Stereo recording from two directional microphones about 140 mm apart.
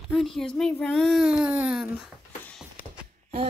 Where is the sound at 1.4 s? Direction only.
10° right (ahead or behind).